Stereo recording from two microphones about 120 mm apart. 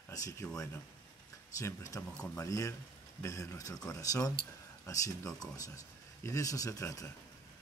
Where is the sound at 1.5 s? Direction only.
30° left (ahead or behind).